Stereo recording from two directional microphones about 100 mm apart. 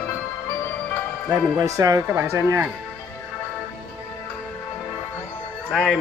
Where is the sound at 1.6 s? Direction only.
35° right (ahead or behind).